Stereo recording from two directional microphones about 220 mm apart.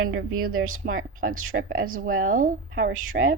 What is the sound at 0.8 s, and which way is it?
Speech, 45° right (ahead or behind).